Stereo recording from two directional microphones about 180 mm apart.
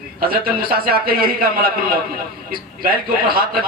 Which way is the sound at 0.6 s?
55° right (ahead or behind).